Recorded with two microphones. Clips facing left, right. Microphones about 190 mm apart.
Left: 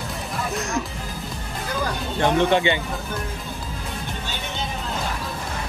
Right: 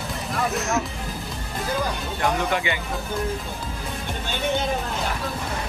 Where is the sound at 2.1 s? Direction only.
30° left (ahead or behind).